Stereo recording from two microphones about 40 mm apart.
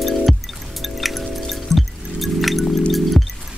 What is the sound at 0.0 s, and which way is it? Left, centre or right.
Music, centre.